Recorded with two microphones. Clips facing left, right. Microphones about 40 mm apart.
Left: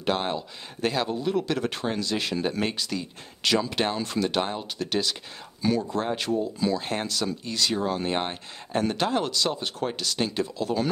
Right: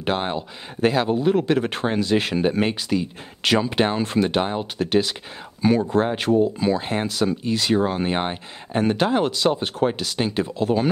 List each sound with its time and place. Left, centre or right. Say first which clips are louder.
0.0 s speech: right 3 dB; right
5.8 s speech: right 6 dB; right
6.9 s speech: right 6 dB; centre